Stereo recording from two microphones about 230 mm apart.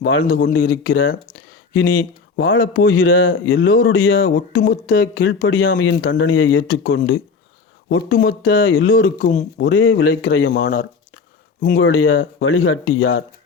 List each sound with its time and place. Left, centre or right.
0.0 s a man's voice: left
4.7 s speech: left
9.1 s speech: left
9.6 s speech: left
10.1 s speech: left
10.3 s speech: left
11.8 s speech: left